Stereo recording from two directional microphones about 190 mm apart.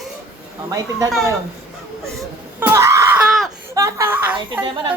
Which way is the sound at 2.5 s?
15° right (ahead or behind).